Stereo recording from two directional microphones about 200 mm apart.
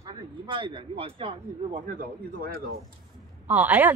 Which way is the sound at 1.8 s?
45° right (ahead or behind).